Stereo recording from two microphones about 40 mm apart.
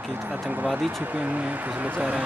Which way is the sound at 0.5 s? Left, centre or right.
Right.